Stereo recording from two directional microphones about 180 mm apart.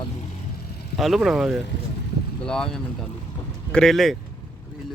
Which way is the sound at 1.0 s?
Centre (ahead or behind).